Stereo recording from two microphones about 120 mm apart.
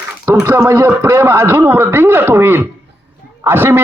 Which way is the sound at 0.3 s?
20° right (ahead or behind).